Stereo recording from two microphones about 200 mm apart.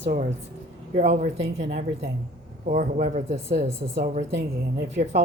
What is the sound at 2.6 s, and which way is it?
A woman's voice, 40° right (ahead or behind).